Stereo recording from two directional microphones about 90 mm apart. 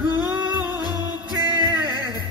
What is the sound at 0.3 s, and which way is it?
Music, 20° right (ahead or behind).